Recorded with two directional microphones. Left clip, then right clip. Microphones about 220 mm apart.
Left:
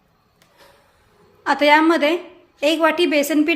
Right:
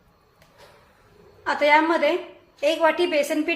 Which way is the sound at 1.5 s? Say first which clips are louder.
Left 4 dB; 50° left (ahead or behind).